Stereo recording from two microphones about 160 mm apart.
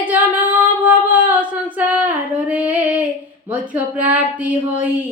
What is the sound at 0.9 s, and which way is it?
Female singing, 10° right (ahead or behind).